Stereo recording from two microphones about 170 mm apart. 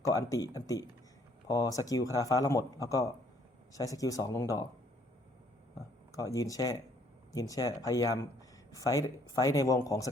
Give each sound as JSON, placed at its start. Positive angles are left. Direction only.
{"t": 0.0, "sound": "speech", "side_deg": 20}
{"t": 6.3, "sound": "speech", "side_deg": 20}